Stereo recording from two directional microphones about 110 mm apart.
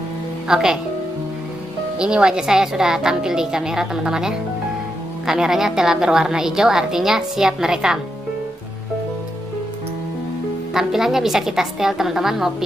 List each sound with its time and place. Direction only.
0.5 s a woman's voice: 5° right (ahead or behind)
2.0 s a woman's voice: 10° right (ahead or behind)
10.7 s a woman's voice: 5° right (ahead or behind)